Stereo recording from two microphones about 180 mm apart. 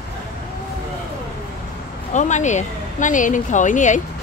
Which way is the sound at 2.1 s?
40° left (ahead or behind).